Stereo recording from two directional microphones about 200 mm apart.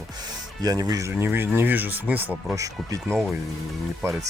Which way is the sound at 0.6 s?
20° right (ahead or behind).